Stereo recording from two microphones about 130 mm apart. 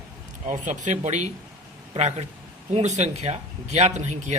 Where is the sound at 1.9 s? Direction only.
55° right (ahead or behind).